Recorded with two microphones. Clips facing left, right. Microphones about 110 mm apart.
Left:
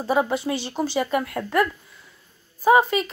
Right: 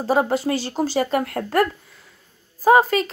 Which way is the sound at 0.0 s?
40° right (ahead or behind).